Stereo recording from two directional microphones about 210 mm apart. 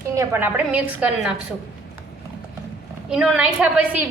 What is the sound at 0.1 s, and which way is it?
A woman's voice, 10° right (ahead or behind).